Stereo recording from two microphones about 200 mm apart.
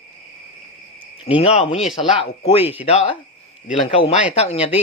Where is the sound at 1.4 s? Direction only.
30° left (ahead or behind).